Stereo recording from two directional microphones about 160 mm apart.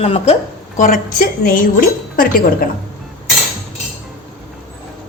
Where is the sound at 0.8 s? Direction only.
55° left (ahead or behind).